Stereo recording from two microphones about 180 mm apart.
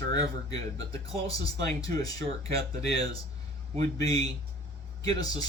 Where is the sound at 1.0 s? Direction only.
20° left (ahead or behind).